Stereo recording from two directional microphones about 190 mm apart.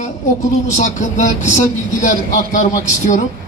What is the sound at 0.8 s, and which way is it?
Speech, 40° left (ahead or behind).